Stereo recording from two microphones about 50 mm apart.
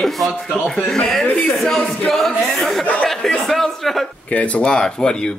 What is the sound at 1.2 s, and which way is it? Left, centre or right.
Speech, left.